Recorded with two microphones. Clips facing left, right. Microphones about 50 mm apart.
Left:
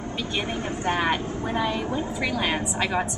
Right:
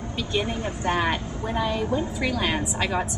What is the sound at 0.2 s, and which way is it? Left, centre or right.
Vehicle, centre.